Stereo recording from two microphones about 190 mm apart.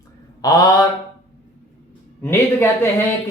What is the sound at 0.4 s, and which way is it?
Speech, 20° left (ahead or behind).